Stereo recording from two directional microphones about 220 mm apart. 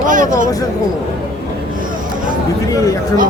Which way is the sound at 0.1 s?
35° right (ahead or behind).